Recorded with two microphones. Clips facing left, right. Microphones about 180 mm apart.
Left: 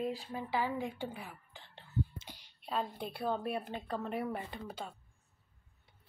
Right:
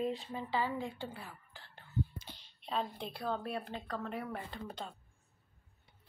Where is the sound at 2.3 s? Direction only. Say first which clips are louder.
Even; 10° left (ahead or behind).